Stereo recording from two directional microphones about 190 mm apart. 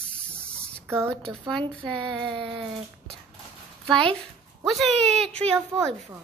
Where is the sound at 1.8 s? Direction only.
25° right (ahead or behind).